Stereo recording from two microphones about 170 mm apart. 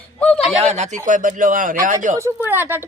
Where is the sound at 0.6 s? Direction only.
40° right (ahead or behind).